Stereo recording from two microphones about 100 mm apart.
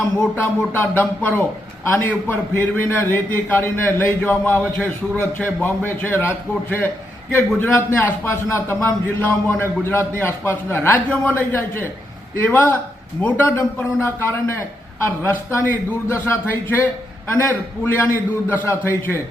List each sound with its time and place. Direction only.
0.3 s a man's voice: 20° left (ahead or behind)